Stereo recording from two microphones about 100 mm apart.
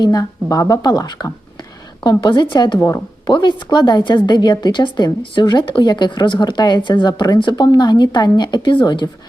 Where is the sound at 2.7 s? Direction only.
30° left (ahead or behind).